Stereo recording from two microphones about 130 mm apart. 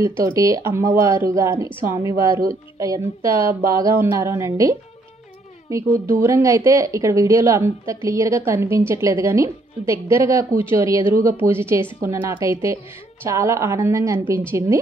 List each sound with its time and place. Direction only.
0.0 s a woman's voice: 25° right (ahead or behind)